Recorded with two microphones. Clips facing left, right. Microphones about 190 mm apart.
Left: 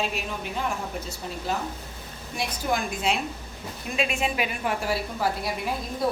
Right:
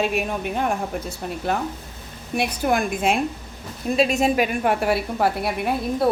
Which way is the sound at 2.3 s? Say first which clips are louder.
Right 6 dB; 60° right (ahead or behind).